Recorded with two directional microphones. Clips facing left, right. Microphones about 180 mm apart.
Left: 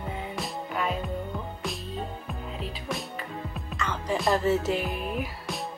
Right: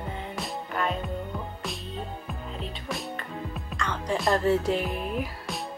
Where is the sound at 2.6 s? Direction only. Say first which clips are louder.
Left 1 dB; centre (ahead or behind).